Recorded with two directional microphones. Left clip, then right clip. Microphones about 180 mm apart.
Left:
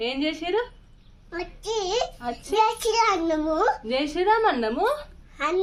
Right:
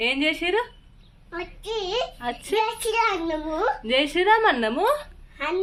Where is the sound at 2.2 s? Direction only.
20° right (ahead or behind).